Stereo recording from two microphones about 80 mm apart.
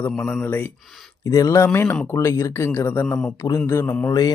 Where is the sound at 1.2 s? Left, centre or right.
Left.